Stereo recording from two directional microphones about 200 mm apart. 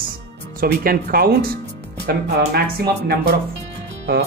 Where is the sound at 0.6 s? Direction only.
50° right (ahead or behind).